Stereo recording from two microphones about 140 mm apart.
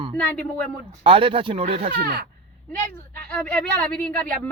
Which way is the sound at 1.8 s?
90° right.